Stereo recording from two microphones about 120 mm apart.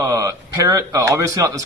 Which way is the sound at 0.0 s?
30° right (ahead or behind).